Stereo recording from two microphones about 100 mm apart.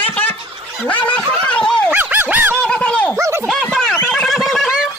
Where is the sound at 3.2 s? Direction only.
30° right (ahead or behind).